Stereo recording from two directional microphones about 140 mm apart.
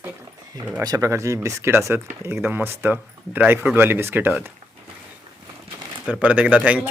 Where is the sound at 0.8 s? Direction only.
25° right (ahead or behind).